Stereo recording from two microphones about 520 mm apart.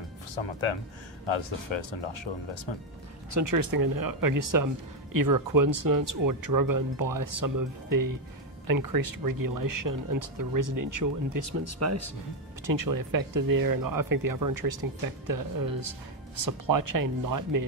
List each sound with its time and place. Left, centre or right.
0.4 s speech: left
3.3 s speech: right
12.6 s speech: right